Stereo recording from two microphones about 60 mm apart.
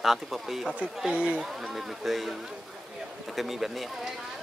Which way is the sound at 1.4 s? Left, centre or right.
Centre.